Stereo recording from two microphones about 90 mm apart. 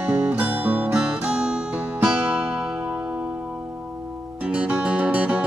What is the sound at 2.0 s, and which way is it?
Music, 20° right (ahead or behind).